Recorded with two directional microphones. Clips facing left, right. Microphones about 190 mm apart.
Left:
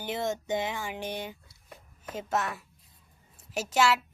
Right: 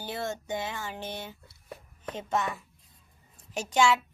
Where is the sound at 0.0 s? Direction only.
20° left (ahead or behind).